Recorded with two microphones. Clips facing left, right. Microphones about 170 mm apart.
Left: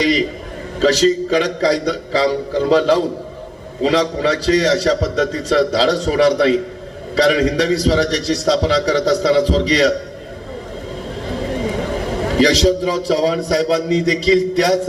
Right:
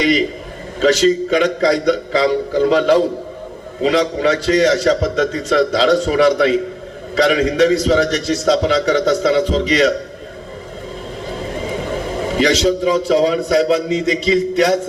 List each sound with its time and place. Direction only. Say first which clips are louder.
0.0 s a sound: right 1 dB; 35° left (ahead or behind)
0.8 s a man's voice: right 1 dB; 35° left (ahead or behind)
12.4 s a man's voice: left 1 dB; 35° left (ahead or behind)